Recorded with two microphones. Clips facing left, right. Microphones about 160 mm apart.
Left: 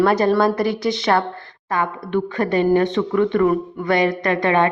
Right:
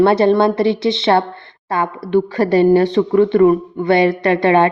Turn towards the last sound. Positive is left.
turn(degrees=-30)  # may be behind; listen again after turning